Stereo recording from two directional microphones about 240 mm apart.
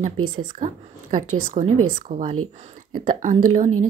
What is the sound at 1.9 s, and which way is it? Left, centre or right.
Speech, right.